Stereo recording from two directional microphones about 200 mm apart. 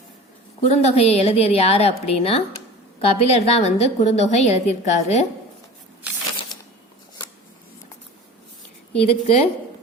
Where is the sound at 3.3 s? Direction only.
30° left (ahead or behind).